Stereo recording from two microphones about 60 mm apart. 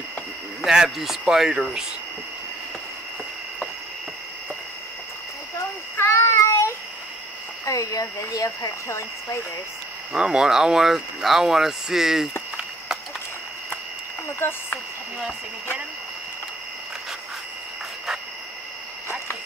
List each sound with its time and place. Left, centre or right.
0.7 s speech: centre
5.9 s child singing: left
7.6 s speech: left
10.1 s speech: centre
14.4 s speech: left